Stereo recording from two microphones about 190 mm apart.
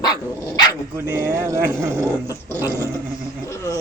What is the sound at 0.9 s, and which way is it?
Speech, 15° right (ahead or behind).